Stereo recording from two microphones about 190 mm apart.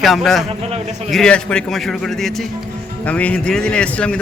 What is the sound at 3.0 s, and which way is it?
Speech, 5° left (ahead or behind).